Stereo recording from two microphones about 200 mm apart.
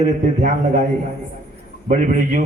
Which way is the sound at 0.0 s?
40° right (ahead or behind).